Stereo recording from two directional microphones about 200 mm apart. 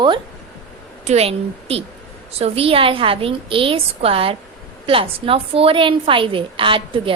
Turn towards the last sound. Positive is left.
turn(degrees=-25)  # may be behind; listen again after turning